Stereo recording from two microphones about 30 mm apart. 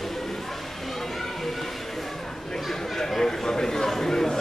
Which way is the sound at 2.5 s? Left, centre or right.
Centre.